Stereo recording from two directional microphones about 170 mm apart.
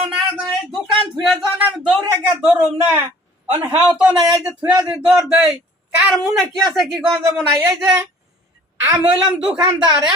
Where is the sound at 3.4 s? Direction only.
10° right (ahead or behind).